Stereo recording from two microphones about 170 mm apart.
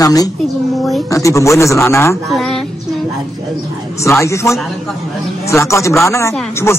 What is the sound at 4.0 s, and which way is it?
A man's voice, 15° left (ahead or behind).